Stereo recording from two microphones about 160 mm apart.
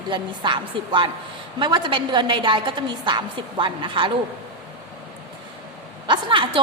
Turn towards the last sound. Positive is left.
turn(degrees=-30)  # may be behind; listen again after turning